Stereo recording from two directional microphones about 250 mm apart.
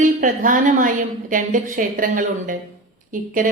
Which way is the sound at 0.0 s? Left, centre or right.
Right.